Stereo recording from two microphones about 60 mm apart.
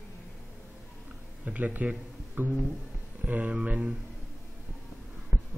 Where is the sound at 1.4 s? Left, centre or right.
Right.